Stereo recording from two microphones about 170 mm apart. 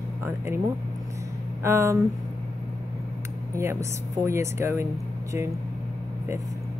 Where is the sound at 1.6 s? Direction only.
15° right (ahead or behind).